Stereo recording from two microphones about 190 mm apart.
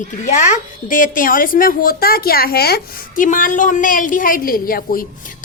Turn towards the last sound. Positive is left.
turn(degrees=50)  # may be behind; listen again after turning